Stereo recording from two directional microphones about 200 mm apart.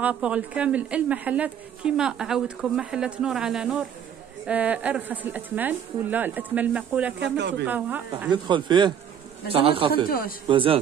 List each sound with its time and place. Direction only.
0.0 s speech: 5° right (ahead or behind)
7.2 s speech: 60° right (ahead or behind)
7.6 s speech: 10° right (ahead or behind)
8.3 s speech: 25° right (ahead or behind)
10.0 s speech: 50° left (ahead or behind)
10.5 s speech: 25° right (ahead or behind)